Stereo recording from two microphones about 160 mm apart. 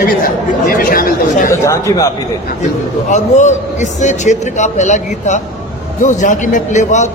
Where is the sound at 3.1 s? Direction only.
45° left (ahead or behind).